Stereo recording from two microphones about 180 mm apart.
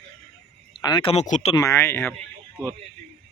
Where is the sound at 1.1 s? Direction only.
40° left (ahead or behind).